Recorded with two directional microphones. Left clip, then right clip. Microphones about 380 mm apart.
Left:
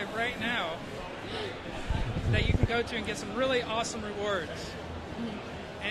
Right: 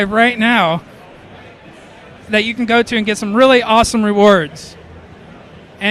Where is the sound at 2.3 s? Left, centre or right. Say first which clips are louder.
Right 17 dB; right.